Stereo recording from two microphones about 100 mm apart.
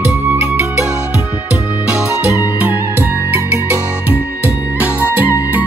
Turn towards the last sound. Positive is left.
turn(degrees=-20)  # may be behind; listen again after turning